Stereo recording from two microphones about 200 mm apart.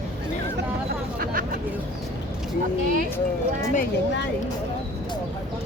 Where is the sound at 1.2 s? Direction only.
45° right (ahead or behind).